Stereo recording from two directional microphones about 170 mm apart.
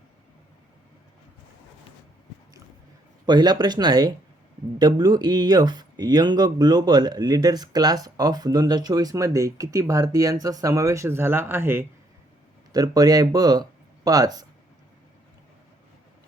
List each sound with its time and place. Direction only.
3.2 s speech: 25° right (ahead or behind)